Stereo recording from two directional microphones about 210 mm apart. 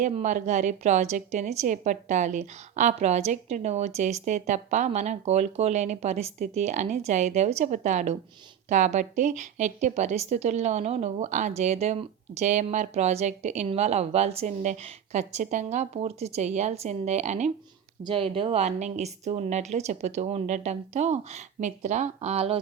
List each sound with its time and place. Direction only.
0.0 s a woman's voice: 35° right (ahead or behind)